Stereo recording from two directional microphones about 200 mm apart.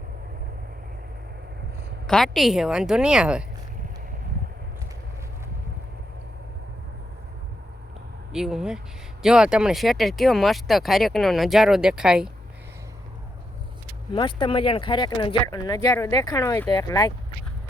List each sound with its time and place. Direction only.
2.0 s speech: centre (ahead or behind)
8.3 s speech: 5° right (ahead or behind)
14.1 s speech: 25° left (ahead or behind)